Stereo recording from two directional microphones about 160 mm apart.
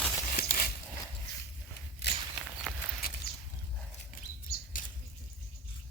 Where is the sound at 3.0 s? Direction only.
70° left (ahead or behind).